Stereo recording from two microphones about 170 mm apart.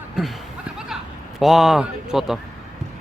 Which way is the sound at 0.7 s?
Centre (ahead or behind).